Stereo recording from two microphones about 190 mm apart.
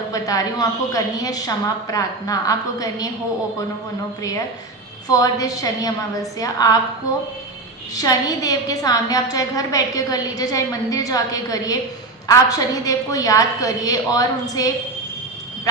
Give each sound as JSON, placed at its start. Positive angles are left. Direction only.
{"t": 0.1, "sound": "a woman's voice", "side_deg": 20}
{"t": 4.2, "sound": "a woman's voice", "side_deg": 20}
{"t": 7.9, "sound": "a woman's voice", "side_deg": 20}